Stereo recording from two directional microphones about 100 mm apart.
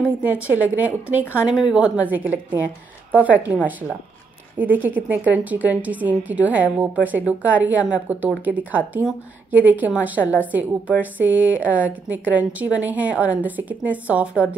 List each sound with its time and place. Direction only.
0.2 s a woman's voice: 15° right (ahead or behind)